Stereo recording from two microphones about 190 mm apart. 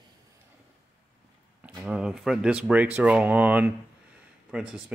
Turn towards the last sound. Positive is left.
turn(degrees=-5)  # may be behind; listen again after turning